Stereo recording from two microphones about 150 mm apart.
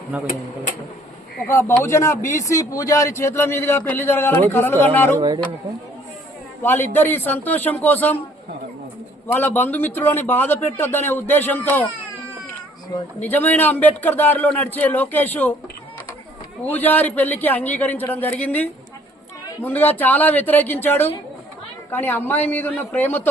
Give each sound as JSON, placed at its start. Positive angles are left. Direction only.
{"t": 0.1, "sound": "speech", "side_deg": -10}
{"t": 1.5, "sound": "a man's voice", "side_deg": 15}
{"t": 6.6, "sound": "a man's voice", "side_deg": 15}
{"t": 9.2, "sound": "a man's voice", "side_deg": 10}
{"t": 13.2, "sound": "a man's voice", "side_deg": 10}
{"t": 16.6, "sound": "a man's voice", "side_deg": 10}